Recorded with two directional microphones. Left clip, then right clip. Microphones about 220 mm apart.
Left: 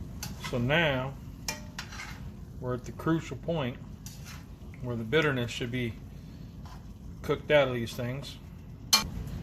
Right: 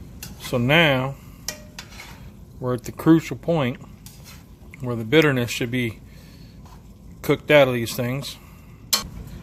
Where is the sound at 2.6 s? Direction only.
55° right (ahead or behind).